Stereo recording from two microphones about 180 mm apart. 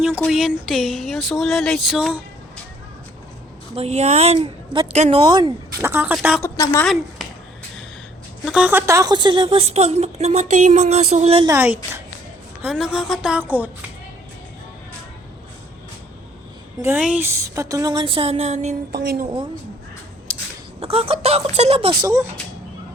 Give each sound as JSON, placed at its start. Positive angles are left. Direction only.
{"t": 0.2, "sound": "a sound", "side_deg": 0}
{"t": 3.8, "sound": "a woman's voice", "side_deg": -35}
{"t": 5.2, "sound": "a woman's voice", "side_deg": -25}
{"t": 5.8, "sound": "speech", "side_deg": -10}
{"t": 6.4, "sound": "a woman's voice", "side_deg": 15}
{"t": 6.8, "sound": "speech", "side_deg": 0}
{"t": 8.4, "sound": "a woman's voice", "side_deg": -5}
{"t": 11.4, "sound": "speech", "side_deg": -15}
{"t": 12.6, "sound": "a sound", "side_deg": -5}
{"t": 16.8, "sound": "a woman's voice", "side_deg": -10}
{"t": 18.9, "sound": "a woman's voice", "side_deg": -60}
{"t": 20.8, "sound": "a woman's voice", "side_deg": -30}
{"t": 22.0, "sound": "a woman's voice", "side_deg": -20}